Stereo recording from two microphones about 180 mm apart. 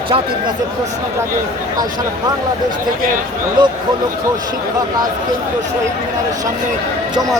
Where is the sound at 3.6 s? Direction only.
25° right (ahead or behind).